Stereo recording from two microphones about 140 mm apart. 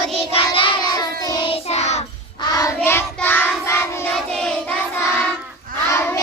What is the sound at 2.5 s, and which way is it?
Child singing, 20° left (ahead or behind).